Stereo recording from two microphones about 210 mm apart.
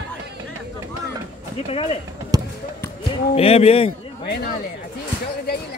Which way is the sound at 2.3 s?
20° right (ahead or behind).